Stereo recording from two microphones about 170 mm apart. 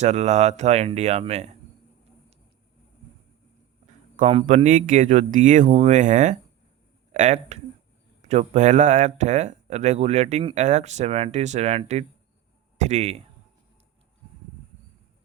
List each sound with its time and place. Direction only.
0.0 s speech: 40° right (ahead or behind)
4.2 s speech: 40° right (ahead or behind)